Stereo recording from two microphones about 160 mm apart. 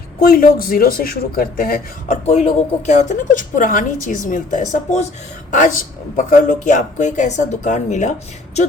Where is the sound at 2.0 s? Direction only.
40° left (ahead or behind).